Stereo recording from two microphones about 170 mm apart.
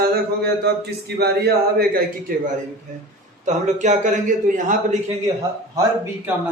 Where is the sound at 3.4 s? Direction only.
45° right (ahead or behind).